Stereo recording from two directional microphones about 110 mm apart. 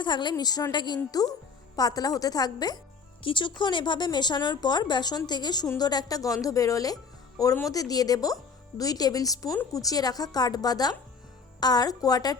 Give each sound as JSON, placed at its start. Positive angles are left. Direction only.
{"t": 0.0, "sound": "a woman's voice", "side_deg": 45}